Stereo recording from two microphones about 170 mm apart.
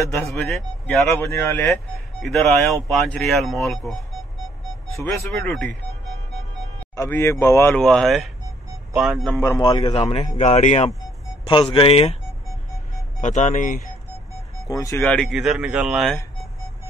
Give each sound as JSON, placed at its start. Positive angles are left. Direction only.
{"t": 0.3, "sound": "speech", "side_deg": 0}
{"t": 1.2, "sound": "speech", "side_deg": 15}
{"t": 2.2, "sound": "speech", "side_deg": 0}
{"t": 5.3, "sound": "speech", "side_deg": 5}
{"t": 7.0, "sound": "speech", "side_deg": 15}
{"t": 7.8, "sound": "speech", "side_deg": 0}
{"t": 9.3, "sound": "speech", "side_deg": 20}
{"t": 9.7, "sound": "speech", "side_deg": 30}
{"t": 13.2, "sound": "speech", "side_deg": 45}
{"t": 14.7, "sound": "speech", "side_deg": 20}
{"t": 15.0, "sound": "speech", "side_deg": 5}